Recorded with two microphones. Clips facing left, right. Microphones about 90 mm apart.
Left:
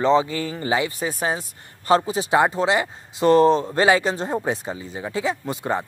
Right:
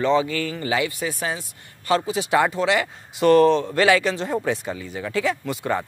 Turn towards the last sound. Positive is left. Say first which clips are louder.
# even
turn(degrees=30)  # may be behind; listen again after turning